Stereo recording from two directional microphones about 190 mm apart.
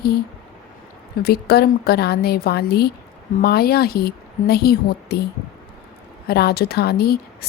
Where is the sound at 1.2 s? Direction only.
55° left (ahead or behind).